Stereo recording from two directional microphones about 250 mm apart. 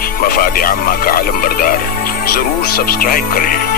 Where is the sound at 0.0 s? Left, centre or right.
Left.